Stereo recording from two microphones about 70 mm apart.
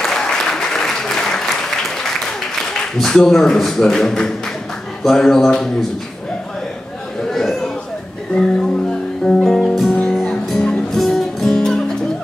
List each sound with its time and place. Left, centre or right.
0.0 s applause: centre
2.7 s a man's voice: centre
7.2 s chatter: centre
9.2 s music: centre